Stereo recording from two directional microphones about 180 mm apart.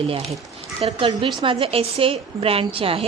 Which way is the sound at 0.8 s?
30° right (ahead or behind).